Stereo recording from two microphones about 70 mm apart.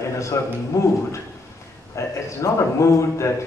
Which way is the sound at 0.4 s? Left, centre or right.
Left.